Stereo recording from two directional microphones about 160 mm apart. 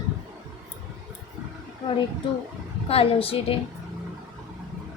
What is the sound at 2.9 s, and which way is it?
Speech, 35° left (ahead or behind).